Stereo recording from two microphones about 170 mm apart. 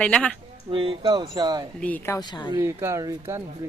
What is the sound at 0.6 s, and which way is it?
Music, 30° right (ahead or behind).